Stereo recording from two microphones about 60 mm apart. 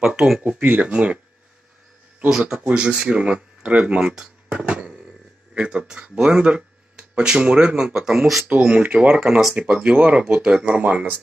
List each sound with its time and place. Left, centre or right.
0.0 s speech: centre
0.4 s speech: right
2.2 s speech: centre